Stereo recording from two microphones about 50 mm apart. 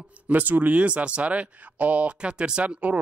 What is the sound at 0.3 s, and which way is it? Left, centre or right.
Speech, right.